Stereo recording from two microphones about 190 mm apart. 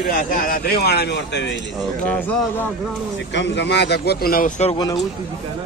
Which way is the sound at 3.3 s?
65° left (ahead or behind).